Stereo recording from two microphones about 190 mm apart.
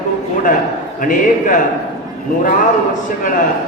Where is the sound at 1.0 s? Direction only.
45° left (ahead or behind).